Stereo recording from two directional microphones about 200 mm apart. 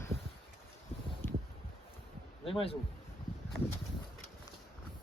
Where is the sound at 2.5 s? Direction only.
25° left (ahead or behind).